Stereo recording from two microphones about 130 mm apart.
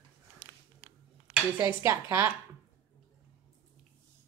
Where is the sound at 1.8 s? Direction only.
20° right (ahead or behind).